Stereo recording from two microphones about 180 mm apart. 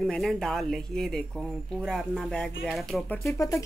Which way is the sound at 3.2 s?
15° left (ahead or behind).